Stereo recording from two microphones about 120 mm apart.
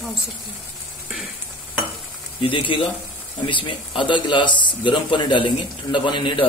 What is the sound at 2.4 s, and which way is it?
A man's voice, 45° left (ahead or behind).